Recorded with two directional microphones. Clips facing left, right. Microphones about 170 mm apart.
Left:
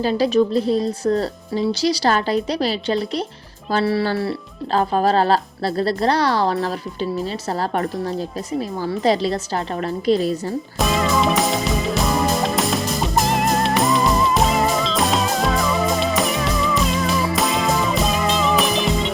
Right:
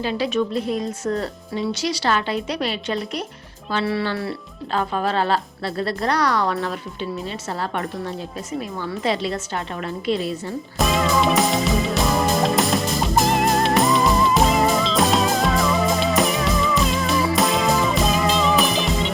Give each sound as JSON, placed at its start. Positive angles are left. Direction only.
{"t": 0.0, "sound": "speech", "side_deg": 40}
{"t": 10.8, "sound": "music", "side_deg": 0}